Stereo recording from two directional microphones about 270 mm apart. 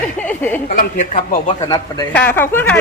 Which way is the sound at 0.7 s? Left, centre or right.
Left.